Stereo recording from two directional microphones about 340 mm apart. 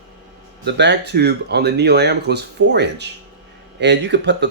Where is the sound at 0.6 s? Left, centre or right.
Right.